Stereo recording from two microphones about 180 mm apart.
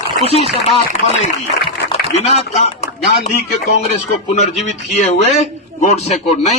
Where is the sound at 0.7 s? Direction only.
35° left (ahead or behind).